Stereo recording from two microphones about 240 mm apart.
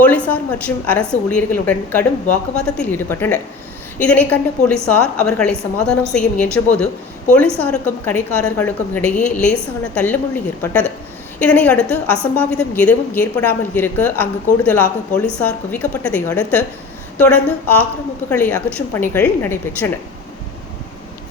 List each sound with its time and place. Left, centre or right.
0.0 s a woman's voice: centre
9.0 s a woman's voice: left
9.3 s a woman's voice: centre